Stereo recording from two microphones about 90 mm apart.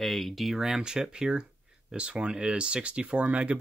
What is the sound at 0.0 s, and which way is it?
Speech, centre (ahead or behind).